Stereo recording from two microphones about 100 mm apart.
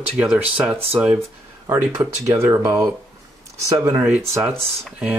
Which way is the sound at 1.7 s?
30° right (ahead or behind).